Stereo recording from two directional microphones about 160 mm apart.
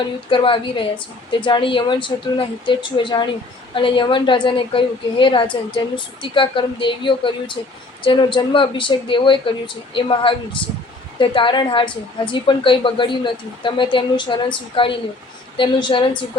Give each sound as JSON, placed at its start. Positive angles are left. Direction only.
{"t": 0.0, "sound": "a woman's voice", "side_deg": 30}